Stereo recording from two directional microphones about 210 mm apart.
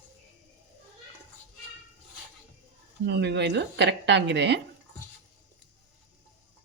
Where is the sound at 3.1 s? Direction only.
55° right (ahead or behind).